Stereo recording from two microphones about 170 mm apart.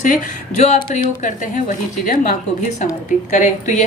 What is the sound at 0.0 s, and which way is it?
A woman's voice, 50° left (ahead or behind).